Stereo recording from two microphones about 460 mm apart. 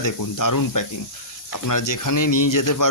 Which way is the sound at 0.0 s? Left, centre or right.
Left.